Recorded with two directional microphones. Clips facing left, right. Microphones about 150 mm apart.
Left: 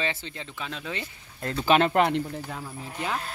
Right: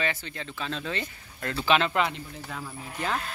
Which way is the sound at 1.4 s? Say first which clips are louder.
Left 3 dB; 40° left (ahead or behind).